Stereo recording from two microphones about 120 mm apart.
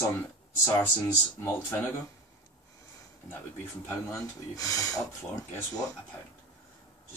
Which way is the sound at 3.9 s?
30° left (ahead or behind).